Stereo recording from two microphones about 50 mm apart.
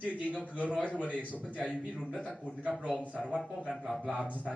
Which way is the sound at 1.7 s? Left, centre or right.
Left.